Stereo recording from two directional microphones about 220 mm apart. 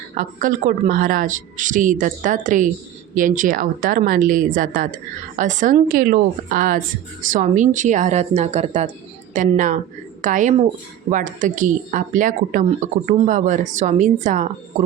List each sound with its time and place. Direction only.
0.2 s speech: 35° right (ahead or behind)